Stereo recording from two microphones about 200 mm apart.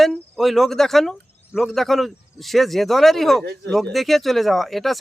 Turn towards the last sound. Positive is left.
turn(degrees=0)  # may be behind; listen again after turning